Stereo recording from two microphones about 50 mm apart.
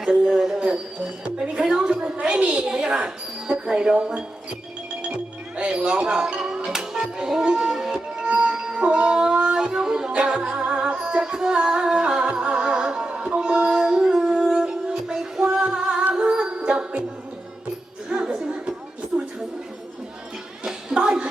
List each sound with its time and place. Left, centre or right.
0.0 s speech: centre
2.0 s a woman's voice: right
5.0 s music: right
18.1 s music: centre
20.7 s a sound: centre